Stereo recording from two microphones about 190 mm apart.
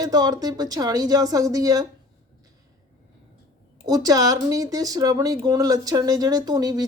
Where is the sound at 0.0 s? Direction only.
20° right (ahead or behind).